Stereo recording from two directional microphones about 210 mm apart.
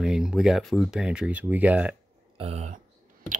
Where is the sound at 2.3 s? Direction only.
30° right (ahead or behind).